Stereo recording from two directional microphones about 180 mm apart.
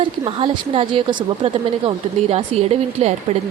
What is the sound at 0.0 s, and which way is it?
A woman's voice, 30° right (ahead or behind).